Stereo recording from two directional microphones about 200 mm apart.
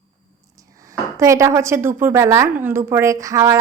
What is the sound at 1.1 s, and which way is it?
A woman's voice, 15° right (ahead or behind).